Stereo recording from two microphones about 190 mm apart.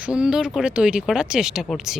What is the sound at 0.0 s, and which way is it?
Speech, 5° right (ahead or behind).